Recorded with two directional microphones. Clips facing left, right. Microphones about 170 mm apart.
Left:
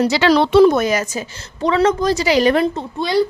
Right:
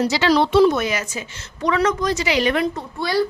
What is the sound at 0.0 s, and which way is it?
Speech, 70° left (ahead or behind).